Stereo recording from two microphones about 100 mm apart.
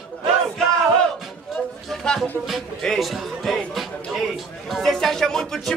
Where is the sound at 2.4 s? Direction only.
Centre (ahead or behind).